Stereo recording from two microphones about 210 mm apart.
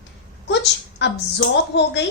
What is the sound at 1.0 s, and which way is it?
Speech, 55° left (ahead or behind).